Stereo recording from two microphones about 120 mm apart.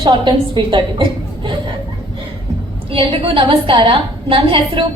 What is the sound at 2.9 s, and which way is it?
A woman's voice, 50° right (ahead or behind).